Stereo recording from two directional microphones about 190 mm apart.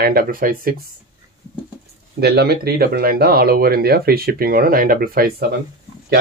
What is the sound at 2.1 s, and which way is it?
Speech, 55° right (ahead or behind).